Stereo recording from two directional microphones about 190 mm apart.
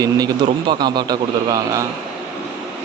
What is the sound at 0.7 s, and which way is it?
A man's voice, 25° right (ahead or behind).